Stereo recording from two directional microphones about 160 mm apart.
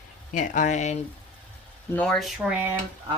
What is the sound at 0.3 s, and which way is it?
Speech, 50° left (ahead or behind).